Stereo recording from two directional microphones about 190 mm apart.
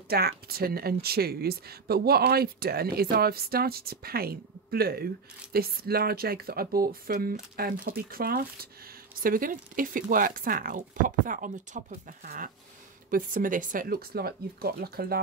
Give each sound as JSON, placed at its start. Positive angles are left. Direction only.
{"t": 0.1, "sound": "speech", "side_deg": -55}